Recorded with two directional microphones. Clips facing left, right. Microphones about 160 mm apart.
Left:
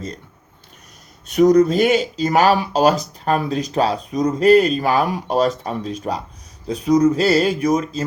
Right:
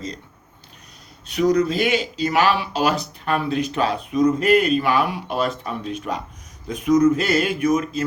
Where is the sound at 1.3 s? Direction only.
45° left (ahead or behind).